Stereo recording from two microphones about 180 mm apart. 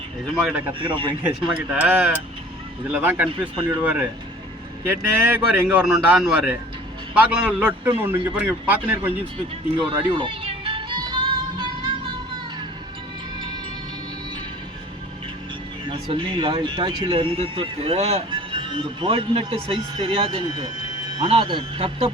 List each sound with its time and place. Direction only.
0.4 s a man's voice: 10° right (ahead or behind)
0.7 s speech: 25° right (ahead or behind)
1.7 s a man's voice: 5° right (ahead or behind)
9.7 s music: 25° right (ahead or behind)
15.9 s speech: 30° right (ahead or behind)